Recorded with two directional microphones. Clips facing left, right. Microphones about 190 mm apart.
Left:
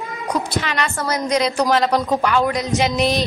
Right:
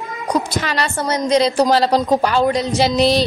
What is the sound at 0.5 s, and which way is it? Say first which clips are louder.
A woman's voice: right 1 dB; 40° right (ahead or behind).